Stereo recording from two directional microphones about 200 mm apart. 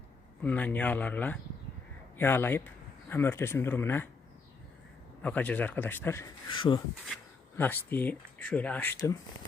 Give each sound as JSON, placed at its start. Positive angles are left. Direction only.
{"t": 0.4, "sound": "speech", "side_deg": 10}
{"t": 5.2, "sound": "speech", "side_deg": 5}
{"t": 6.6, "sound": "speech", "side_deg": 25}
{"t": 7.5, "sound": "speech", "side_deg": 10}